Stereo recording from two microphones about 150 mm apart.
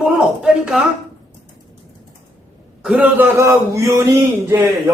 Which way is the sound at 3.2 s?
20° right (ahead or behind).